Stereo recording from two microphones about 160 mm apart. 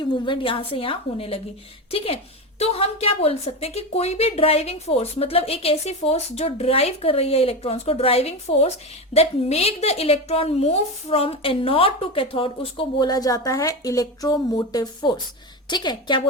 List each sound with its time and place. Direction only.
0.0 s a woman's voice: 30° left (ahead or behind)
2.6 s a woman's voice: 40° left (ahead or behind)